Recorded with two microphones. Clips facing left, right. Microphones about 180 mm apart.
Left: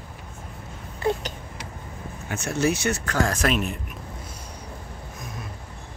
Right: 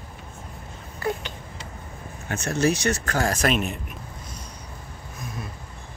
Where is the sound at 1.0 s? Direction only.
25° left (ahead or behind).